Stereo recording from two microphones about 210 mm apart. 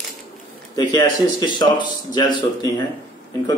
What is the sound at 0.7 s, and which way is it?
A man's voice, 20° left (ahead or behind).